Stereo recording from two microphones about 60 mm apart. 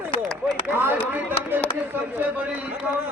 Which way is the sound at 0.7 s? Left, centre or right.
Right.